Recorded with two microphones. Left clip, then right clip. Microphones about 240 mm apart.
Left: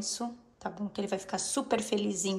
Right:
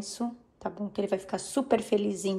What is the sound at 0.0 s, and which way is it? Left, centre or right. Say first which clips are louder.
A woman's voice: even; centre.